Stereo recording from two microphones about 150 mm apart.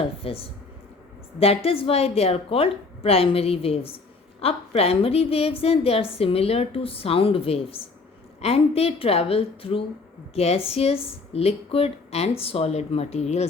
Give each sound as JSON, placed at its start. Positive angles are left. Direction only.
{"t": 0.0, "sound": "a woman's voice", "side_deg": 40}